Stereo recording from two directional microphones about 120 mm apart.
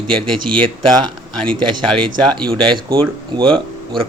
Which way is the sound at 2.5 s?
40° right (ahead or behind).